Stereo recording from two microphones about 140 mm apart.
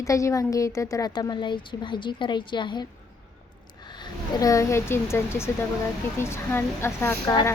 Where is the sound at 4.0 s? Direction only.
25° left (ahead or behind).